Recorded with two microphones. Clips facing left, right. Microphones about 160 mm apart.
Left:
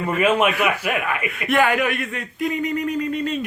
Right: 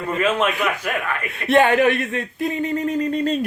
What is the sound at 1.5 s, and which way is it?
Speech, 25° right (ahead or behind).